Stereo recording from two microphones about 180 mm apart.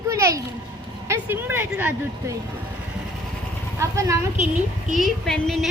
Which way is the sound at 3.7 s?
15° right (ahead or behind).